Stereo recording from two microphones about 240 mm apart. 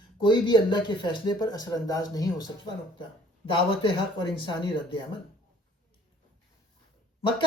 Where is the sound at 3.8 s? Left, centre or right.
Centre.